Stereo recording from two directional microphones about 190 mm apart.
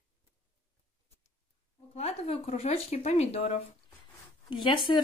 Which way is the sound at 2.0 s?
35° left (ahead or behind).